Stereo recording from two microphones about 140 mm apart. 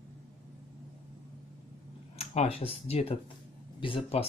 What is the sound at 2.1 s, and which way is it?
Speech, 50° left (ahead or behind).